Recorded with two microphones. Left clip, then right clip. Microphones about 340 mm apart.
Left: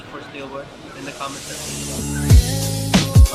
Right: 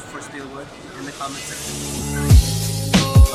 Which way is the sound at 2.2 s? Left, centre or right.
Centre.